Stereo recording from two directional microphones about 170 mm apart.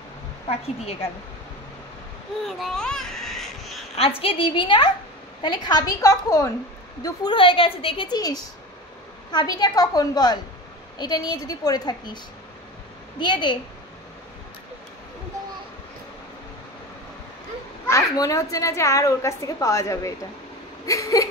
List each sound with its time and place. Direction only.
2.4 s babbling: centre (ahead or behind)
3.9 s a woman's voice: 35° left (ahead or behind); by 6.5 s 20° left (ahead or behind)
7.0 s a woman's voice: 30° left (ahead or behind)
13.2 s a child's voice: 25° left (ahead or behind)
17.8 s a child's voice: 20° left (ahead or behind)